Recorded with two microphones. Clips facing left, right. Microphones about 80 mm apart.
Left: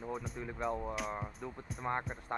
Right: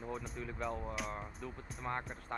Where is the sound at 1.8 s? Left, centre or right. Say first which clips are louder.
Left 4 dB; centre.